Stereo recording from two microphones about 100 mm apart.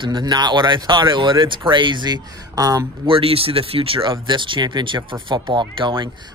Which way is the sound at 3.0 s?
65° right (ahead or behind).